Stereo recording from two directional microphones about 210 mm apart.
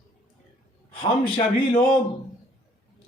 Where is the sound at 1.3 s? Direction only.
25° left (ahead or behind).